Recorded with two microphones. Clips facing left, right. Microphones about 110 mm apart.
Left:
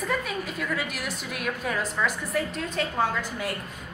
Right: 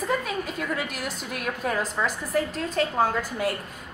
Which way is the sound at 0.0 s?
30° right (ahead or behind).